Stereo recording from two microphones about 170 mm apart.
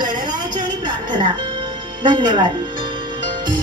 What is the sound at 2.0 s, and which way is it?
Speech, 25° right (ahead or behind).